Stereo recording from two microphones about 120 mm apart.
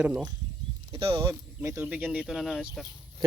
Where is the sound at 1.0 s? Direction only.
45° right (ahead or behind).